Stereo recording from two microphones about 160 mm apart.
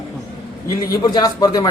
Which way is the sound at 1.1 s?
25° left (ahead or behind).